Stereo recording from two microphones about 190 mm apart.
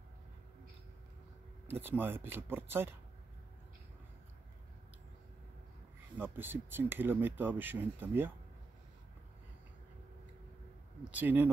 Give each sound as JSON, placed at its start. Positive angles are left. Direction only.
{"t": 1.7, "sound": "speech", "side_deg": -10}
{"t": 6.1, "sound": "speech", "side_deg": -10}
{"t": 11.1, "sound": "speech", "side_deg": -10}